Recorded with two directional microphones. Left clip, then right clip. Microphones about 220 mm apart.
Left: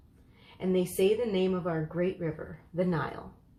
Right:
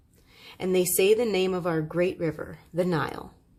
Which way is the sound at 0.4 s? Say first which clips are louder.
Right 5 dB; 45° right (ahead or behind).